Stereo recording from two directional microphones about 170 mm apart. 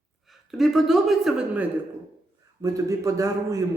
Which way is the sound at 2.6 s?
20° right (ahead or behind).